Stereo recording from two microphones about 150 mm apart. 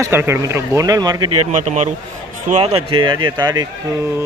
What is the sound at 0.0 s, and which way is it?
Speech, 15° right (ahead or behind).